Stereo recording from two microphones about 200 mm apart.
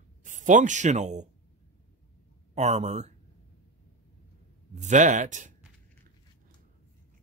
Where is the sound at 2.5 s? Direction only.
35° right (ahead or behind).